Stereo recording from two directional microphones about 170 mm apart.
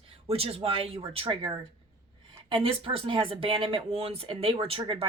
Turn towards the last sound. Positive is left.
turn(degrees=-30)  # may be behind; listen again after turning